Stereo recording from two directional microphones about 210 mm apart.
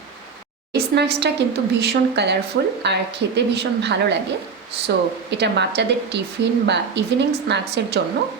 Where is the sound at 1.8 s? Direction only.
55° right (ahead or behind).